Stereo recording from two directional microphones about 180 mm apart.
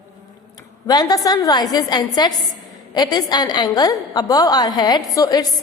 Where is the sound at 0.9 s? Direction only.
20° left (ahead or behind).